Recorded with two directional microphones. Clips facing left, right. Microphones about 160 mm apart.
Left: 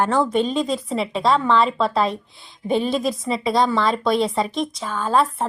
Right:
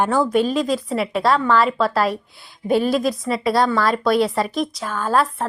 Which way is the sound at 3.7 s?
25° left (ahead or behind).